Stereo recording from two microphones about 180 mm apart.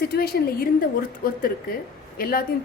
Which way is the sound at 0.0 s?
60° left (ahead or behind).